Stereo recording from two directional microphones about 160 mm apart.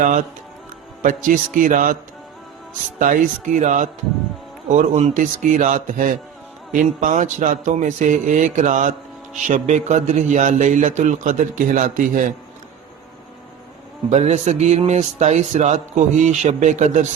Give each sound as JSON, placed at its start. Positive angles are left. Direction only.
{"t": 0.0, "sound": "a man's voice", "side_deg": -50}
{"t": 3.0, "sound": "speech", "side_deg": -55}
{"t": 14.1, "sound": "speech", "side_deg": -45}